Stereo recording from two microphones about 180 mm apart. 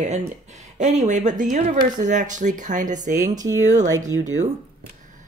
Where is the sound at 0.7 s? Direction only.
40° right (ahead or behind).